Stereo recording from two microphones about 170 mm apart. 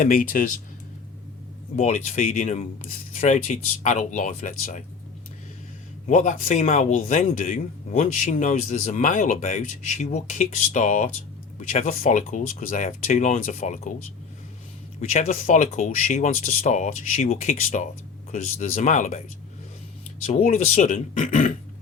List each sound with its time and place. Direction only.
0.0 s speech: 55° left (ahead or behind)
1.7 s speech: 40° left (ahead or behind)
6.1 s speech: 50° left (ahead or behind)
15.1 s speech: 45° left (ahead or behind)
20.2 s speech: 40° left (ahead or behind)